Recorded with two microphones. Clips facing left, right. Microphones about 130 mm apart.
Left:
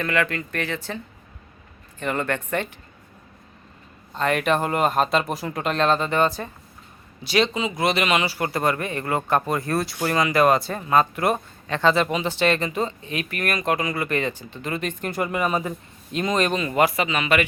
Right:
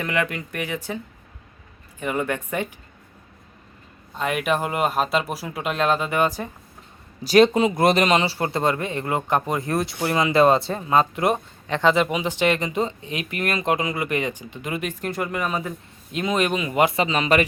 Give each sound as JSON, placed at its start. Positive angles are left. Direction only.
{"t": 0.0, "sound": "speech", "side_deg": -15}
{"t": 2.0, "sound": "speech", "side_deg": -10}
{"t": 4.1, "sound": "speech", "side_deg": -5}
{"t": 7.3, "sound": "speech", "side_deg": -50}
{"t": 15.0, "sound": "speech", "side_deg": 0}
{"t": 16.1, "sound": "speech", "side_deg": -5}
{"t": 16.8, "sound": "a man's voice", "side_deg": -30}